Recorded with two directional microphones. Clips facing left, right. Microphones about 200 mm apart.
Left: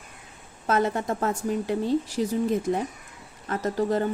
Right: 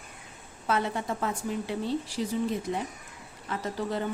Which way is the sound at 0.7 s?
45° left (ahead or behind).